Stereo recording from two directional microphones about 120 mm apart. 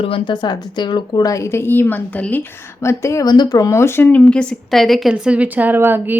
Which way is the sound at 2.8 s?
25° left (ahead or behind).